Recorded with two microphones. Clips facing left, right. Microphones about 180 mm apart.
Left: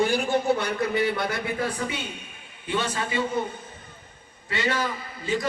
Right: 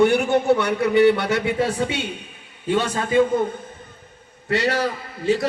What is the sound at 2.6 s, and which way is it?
Speech, 45° right (ahead or behind).